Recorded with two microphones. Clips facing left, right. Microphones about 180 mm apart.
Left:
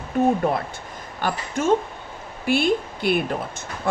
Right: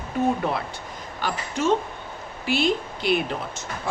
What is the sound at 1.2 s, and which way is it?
Speech, 50° left (ahead or behind).